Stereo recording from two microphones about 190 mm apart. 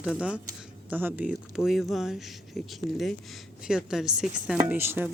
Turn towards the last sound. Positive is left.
turn(degrees=-10)  # may be behind; listen again after turning